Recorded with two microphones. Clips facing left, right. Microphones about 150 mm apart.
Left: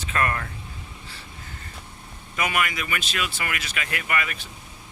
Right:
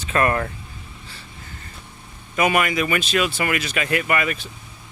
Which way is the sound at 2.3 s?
25° right (ahead or behind).